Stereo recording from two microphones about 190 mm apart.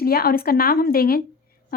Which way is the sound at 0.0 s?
55° left (ahead or behind).